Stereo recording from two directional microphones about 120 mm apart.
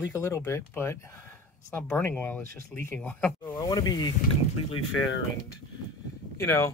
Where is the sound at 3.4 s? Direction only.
35° left (ahead or behind).